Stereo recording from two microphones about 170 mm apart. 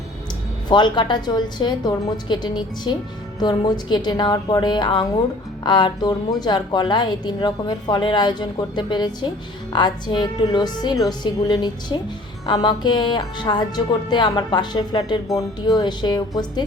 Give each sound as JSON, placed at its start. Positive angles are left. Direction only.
{"t": 0.7, "sound": "a woman's voice", "side_deg": 25}